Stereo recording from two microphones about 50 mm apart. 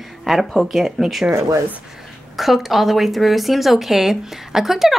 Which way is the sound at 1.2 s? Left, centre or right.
Right.